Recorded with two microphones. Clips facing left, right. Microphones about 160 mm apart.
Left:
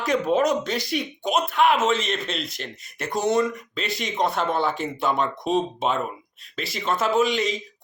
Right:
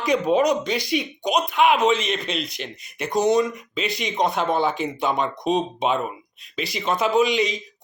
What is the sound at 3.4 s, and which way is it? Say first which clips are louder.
Speech: right 1 dB; 20° right (ahead or behind).